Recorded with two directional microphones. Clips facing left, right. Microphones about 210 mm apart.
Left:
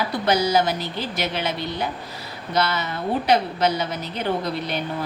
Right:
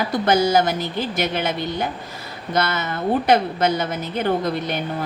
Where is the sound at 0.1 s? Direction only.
50° right (ahead or behind).